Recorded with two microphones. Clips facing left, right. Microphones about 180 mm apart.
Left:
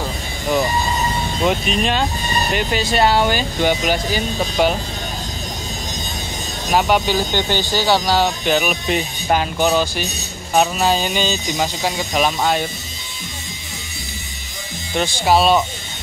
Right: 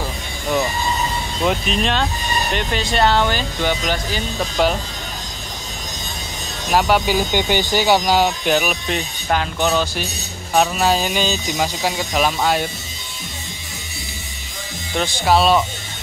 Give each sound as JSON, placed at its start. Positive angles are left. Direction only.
{"t": 1.4, "sound": "speech", "side_deg": 5}
{"t": 6.7, "sound": "speech", "side_deg": 0}
{"t": 7.2, "sound": "speech", "side_deg": -15}
{"t": 8.5, "sound": "speech", "side_deg": 0}
{"t": 8.8, "sound": "speech", "side_deg": 10}
{"t": 15.0, "sound": "speech", "side_deg": 5}